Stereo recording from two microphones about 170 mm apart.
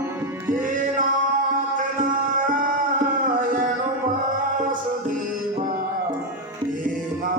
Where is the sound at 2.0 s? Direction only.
55° right (ahead or behind).